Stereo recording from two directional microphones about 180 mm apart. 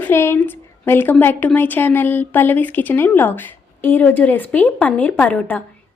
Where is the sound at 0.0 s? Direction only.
15° left (ahead or behind).